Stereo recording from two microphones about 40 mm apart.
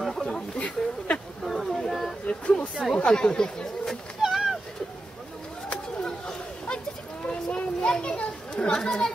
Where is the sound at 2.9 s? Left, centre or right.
Left.